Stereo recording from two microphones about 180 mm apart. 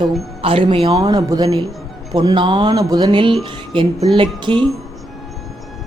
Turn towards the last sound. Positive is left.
turn(degrees=-25)  # may be behind; listen again after turning